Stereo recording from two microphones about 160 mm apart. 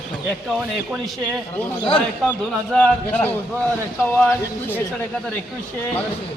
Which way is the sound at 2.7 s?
5° left (ahead or behind).